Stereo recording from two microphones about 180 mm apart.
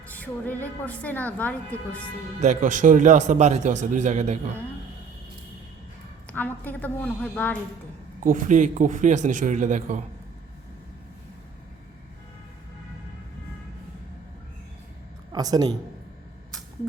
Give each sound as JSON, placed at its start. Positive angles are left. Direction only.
{"t": 0.1, "sound": "a woman's voice", "side_deg": 10}
{"t": 2.4, "sound": "speech", "side_deg": -45}
{"t": 6.3, "sound": "a woman's voice", "side_deg": 10}
{"t": 8.2, "sound": "a man's voice", "side_deg": -50}
{"t": 15.3, "sound": "speech", "side_deg": -20}